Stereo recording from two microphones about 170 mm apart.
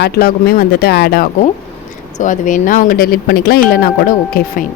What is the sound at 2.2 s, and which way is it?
Speech, 50° left (ahead or behind).